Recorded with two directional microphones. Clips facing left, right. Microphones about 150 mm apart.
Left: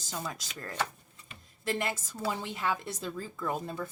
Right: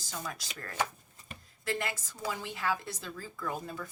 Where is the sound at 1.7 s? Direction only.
20° left (ahead or behind).